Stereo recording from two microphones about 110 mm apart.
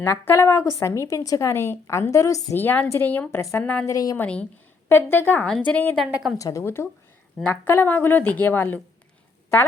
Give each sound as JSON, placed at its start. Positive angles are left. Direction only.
{"t": 0.0, "sound": "a woman's voice", "side_deg": 20}
{"t": 2.6, "sound": "a woman's voice", "side_deg": 15}
{"t": 3.8, "sound": "a woman's voice", "side_deg": 30}
{"t": 4.2, "sound": "a woman's voice", "side_deg": 10}
{"t": 5.5, "sound": "a woman's voice", "side_deg": 5}
{"t": 5.7, "sound": "speech", "side_deg": 15}
{"t": 6.3, "sound": "a woman's voice", "side_deg": 30}